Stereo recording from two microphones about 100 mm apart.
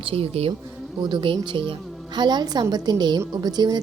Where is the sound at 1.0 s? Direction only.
50° right (ahead or behind).